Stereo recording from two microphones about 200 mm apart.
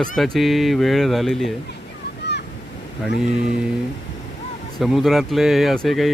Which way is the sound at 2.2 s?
60° left (ahead or behind).